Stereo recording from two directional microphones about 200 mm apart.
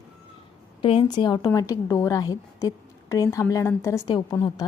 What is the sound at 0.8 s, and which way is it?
A woman's voice, 25° left (ahead or behind).